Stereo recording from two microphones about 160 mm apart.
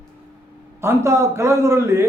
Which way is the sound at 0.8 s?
20° right (ahead or behind).